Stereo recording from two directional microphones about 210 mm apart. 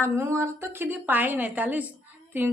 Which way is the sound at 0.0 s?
15° right (ahead or behind).